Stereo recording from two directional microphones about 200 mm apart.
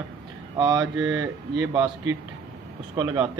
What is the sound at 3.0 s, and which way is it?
Speech, 15° right (ahead or behind).